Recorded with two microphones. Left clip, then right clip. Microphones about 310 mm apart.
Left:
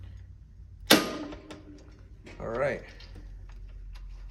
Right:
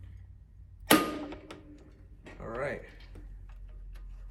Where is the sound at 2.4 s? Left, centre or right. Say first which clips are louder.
Left 6 dB; centre.